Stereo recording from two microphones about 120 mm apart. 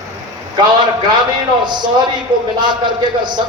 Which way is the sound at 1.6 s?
40° right (ahead or behind).